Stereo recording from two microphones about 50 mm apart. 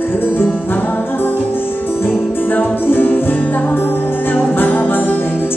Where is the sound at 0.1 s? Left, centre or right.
Left.